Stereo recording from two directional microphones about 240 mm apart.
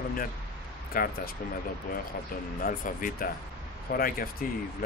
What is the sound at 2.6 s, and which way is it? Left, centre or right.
Speech, left.